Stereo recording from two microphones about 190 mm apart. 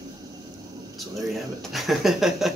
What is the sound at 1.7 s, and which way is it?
Speech, centre (ahead or behind).